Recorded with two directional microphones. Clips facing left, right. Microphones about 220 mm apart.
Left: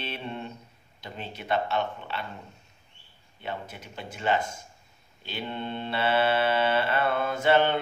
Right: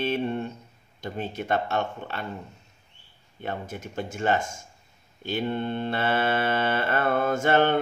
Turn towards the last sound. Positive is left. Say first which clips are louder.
# right 2 dB
turn(degrees=-45)  # may be behind; listen again after turning